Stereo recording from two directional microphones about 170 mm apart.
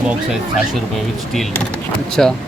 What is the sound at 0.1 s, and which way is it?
Speech, centre (ahead or behind).